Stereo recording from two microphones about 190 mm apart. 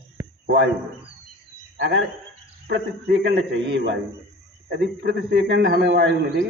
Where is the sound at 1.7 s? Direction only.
70° right (ahead or behind).